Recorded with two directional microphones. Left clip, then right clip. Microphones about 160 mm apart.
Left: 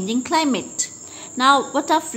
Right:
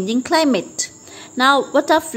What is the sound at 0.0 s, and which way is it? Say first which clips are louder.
A woman's voice: right 3 dB; 35° right (ahead or behind).